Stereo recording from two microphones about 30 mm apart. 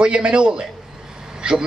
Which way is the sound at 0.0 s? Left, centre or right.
Right.